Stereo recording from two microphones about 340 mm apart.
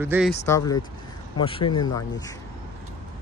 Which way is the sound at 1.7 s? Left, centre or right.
Left.